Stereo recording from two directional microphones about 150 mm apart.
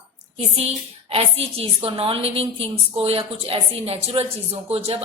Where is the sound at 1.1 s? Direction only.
40° right (ahead or behind).